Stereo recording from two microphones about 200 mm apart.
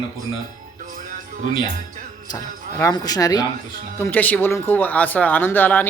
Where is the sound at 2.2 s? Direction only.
15° left (ahead or behind).